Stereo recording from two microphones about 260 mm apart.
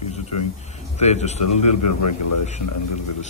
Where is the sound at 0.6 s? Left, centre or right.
Left.